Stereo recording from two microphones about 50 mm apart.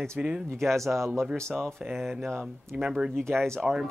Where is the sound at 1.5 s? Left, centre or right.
Centre.